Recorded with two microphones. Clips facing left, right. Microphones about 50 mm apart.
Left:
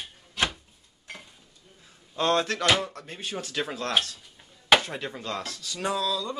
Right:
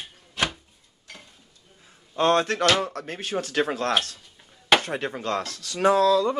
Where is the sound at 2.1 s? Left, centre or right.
Right.